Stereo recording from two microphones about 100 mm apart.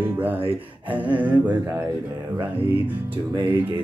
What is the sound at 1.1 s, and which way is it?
Music, 15° right (ahead or behind).